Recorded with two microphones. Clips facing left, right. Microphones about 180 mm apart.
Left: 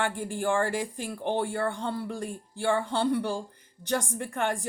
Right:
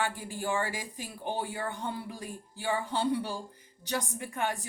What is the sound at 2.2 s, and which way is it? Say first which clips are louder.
Music: left 7 dB; 50° left (ahead or behind).